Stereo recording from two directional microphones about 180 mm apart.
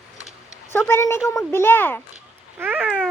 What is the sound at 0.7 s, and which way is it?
A woman's voice, 15° left (ahead or behind).